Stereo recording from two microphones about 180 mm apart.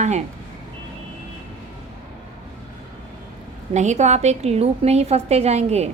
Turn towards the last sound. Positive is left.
turn(degrees=-35)  # may be behind; listen again after turning